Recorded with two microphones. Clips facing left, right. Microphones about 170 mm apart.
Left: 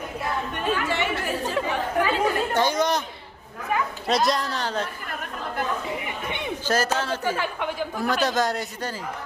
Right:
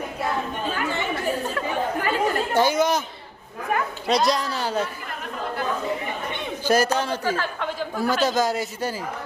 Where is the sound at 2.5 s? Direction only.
10° right (ahead or behind).